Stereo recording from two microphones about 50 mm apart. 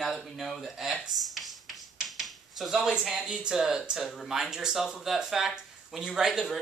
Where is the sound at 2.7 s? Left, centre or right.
Centre.